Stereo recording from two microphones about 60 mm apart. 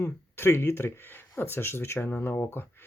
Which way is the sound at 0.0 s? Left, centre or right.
Left.